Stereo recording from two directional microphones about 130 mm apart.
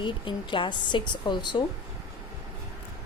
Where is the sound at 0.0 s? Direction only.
40° left (ahead or behind).